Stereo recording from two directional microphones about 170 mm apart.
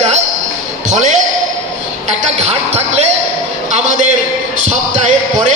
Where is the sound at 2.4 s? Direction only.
40° right (ahead or behind).